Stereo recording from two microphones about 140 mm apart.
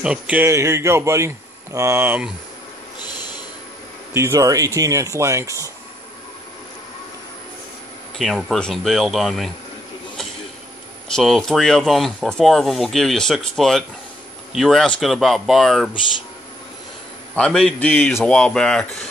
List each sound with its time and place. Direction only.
0.0 s speech: 10° right (ahead or behind)
4.1 s speech: 20° right (ahead or behind)
8.2 s speech: centre (ahead or behind)
11.1 s speech: centre (ahead or behind)
17.4 s speech: 5° left (ahead or behind)